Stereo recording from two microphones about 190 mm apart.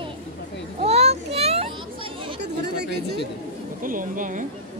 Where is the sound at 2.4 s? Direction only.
60° right (ahead or behind).